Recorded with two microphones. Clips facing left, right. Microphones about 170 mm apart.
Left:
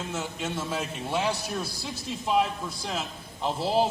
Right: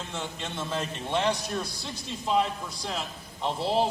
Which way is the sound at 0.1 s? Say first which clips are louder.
Left 3 dB; 5° left (ahead or behind).